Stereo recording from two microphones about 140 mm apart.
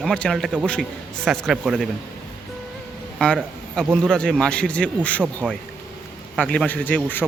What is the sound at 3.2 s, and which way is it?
A man's voice, 10° left (ahead or behind).